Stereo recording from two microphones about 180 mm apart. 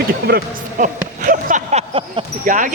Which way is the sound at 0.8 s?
50° right (ahead or behind).